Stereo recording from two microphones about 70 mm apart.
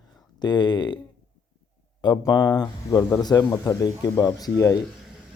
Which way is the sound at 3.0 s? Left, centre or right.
Left.